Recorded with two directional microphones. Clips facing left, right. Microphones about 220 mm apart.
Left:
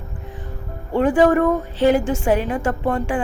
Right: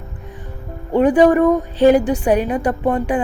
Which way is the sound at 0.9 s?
20° right (ahead or behind).